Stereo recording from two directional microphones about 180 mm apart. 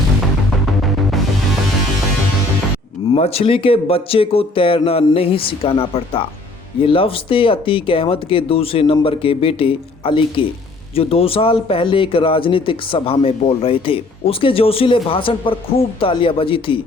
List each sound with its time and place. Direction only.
3.1 s speech: 35° left (ahead or behind)